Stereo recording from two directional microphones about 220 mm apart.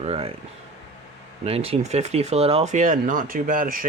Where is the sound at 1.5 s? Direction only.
25° right (ahead or behind).